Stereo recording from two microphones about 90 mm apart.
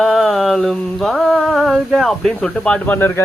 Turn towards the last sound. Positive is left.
turn(degrees=25)  # may be behind; listen again after turning